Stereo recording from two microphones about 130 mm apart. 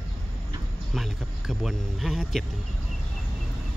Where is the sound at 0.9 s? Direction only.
Centre (ahead or behind).